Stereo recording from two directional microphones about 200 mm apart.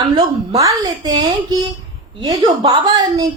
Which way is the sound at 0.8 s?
20° right (ahead or behind).